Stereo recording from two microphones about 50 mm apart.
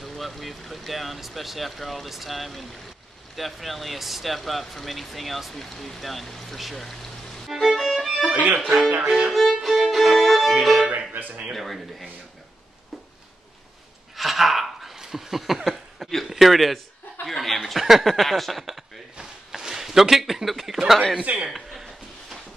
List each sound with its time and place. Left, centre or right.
0.0 s speech: centre
8.3 s music: right
9.0 s music: centre
9.3 s violin: centre
10.6 s music: centre
10.9 s music: right
11.5 s speech: centre
14.1 s a sound: centre
16.3 s speech: centre
19.1 s a sound: centre
21.2 s a man's voice: right
21.5 s a sound: centre